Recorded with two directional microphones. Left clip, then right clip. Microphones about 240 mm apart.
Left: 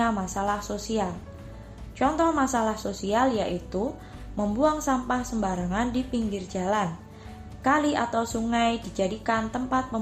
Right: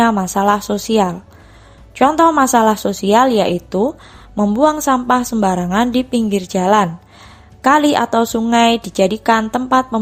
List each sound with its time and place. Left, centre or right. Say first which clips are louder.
0.0 s a woman's voice: right 12 dB; right